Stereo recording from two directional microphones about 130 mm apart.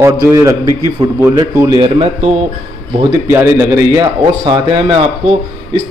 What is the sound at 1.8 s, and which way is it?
Speech, 50° right (ahead or behind).